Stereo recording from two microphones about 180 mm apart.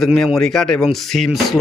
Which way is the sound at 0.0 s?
Centre (ahead or behind).